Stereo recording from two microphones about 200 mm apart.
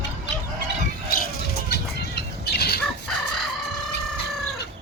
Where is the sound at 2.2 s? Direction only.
55° left (ahead or behind).